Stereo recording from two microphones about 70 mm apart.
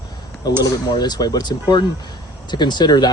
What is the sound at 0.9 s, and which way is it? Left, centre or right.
Speech, left.